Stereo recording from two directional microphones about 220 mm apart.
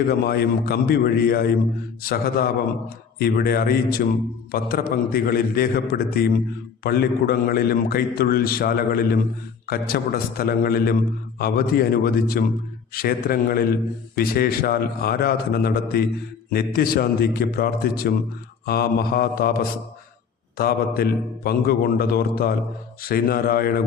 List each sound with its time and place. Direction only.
0.1 s a man's voice: 45° left (ahead or behind)